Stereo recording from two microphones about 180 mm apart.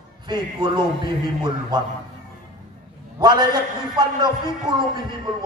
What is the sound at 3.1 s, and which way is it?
A man's voice, 25° right (ahead or behind).